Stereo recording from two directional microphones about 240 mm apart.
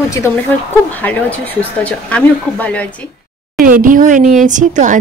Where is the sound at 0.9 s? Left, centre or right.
Centre.